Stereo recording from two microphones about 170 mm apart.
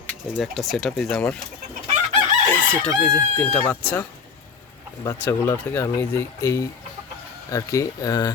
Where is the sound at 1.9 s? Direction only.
40° right (ahead or behind).